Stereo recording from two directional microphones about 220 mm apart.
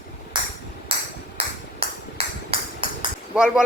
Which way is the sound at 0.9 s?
25° right (ahead or behind).